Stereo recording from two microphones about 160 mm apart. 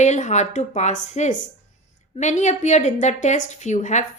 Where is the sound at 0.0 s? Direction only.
45° left (ahead or behind).